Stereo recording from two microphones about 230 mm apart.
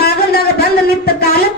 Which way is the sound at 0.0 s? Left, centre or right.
Left.